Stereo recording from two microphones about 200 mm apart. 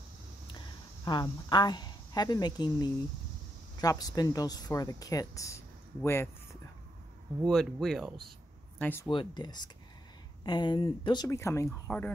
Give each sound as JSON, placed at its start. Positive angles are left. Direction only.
{"t": 1.0, "sound": "speech", "side_deg": 20}
{"t": 7.4, "sound": "speech", "side_deg": 0}
{"t": 9.1, "sound": "speech", "side_deg": 20}